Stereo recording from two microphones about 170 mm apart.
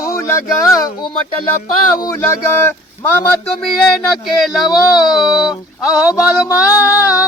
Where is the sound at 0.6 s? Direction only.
20° left (ahead or behind).